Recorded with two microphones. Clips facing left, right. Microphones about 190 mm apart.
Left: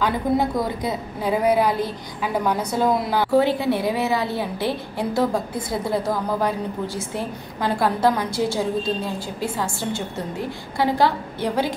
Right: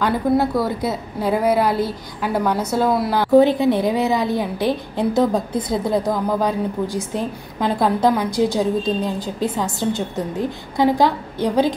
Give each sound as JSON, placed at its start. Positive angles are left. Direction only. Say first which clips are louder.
{"t": 0.0, "sound": "a woman's voice", "louder": "right 3 dB", "side_deg": 15}
{"t": 3.3, "sound": "a woman's voice", "louder": "right 6 dB", "side_deg": -20}